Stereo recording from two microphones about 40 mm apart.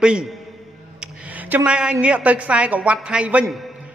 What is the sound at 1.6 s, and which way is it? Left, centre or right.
A man's voice, right.